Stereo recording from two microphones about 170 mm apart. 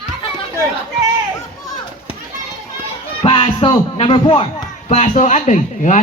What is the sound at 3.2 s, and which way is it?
Speech, 30° left (ahead or behind).